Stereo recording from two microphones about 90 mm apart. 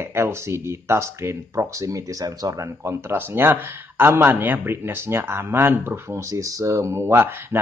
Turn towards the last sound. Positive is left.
turn(degrees=-25)  # may be behind; listen again after turning